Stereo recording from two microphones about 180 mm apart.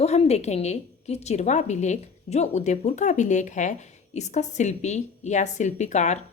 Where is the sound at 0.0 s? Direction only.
35° left (ahead or behind).